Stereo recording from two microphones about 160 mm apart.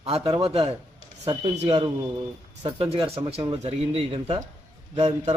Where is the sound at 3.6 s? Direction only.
40° right (ahead or behind).